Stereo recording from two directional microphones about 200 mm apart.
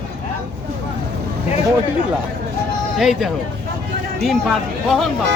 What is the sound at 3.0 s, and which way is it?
Speech, centre (ahead or behind).